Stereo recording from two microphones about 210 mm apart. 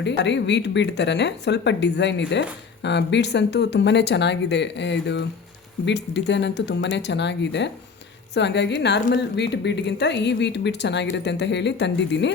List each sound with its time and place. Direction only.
0.0 s a woman's voice: 55° left (ahead or behind)